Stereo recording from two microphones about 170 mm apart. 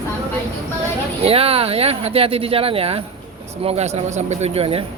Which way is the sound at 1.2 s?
35° right (ahead or behind).